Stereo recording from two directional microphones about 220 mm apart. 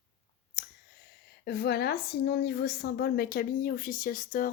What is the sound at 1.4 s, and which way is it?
A woman's voice, 45° left (ahead or behind).